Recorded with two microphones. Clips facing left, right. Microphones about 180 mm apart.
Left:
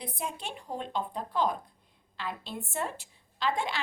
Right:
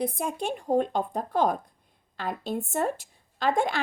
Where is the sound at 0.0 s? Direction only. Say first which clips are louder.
Right 8 dB; 45° right (ahead or behind).